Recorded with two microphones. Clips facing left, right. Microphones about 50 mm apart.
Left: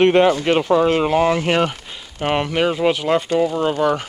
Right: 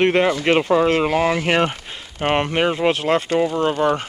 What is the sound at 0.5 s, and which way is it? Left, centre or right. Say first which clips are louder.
Speech: left 1 dB; centre.